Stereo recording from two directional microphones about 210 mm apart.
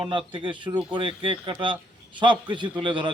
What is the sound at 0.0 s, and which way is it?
Speech, 25° right (ahead or behind).